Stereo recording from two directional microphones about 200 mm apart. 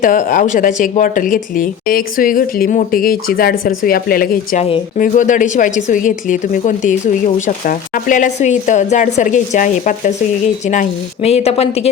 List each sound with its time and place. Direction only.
0.0 s speech: 40° left (ahead or behind)